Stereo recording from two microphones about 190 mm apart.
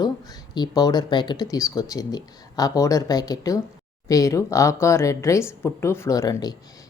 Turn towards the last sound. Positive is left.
turn(degrees=20)  # may be behind; listen again after turning